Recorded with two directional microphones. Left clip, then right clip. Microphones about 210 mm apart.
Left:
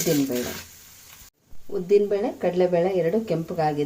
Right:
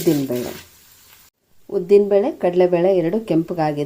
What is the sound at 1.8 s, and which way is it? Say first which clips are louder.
A woman's voice: right 6 dB; 45° right (ahead or behind).